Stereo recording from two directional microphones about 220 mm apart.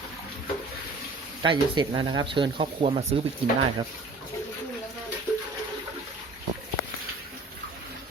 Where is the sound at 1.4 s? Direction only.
20° right (ahead or behind).